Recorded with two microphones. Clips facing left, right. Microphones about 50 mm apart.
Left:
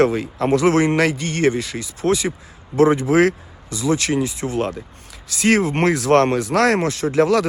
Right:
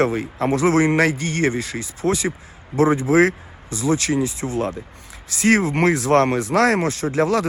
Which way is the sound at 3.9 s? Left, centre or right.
Left.